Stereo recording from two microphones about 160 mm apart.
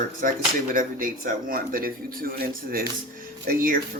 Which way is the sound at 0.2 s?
55° right (ahead or behind).